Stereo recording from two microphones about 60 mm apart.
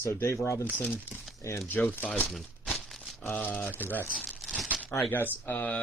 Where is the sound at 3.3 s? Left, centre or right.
Left.